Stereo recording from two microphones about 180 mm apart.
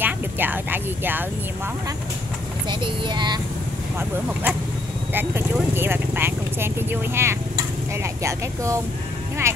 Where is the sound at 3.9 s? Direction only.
10° right (ahead or behind).